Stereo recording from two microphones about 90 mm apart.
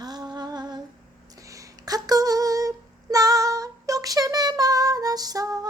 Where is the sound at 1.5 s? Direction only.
40° right (ahead or behind).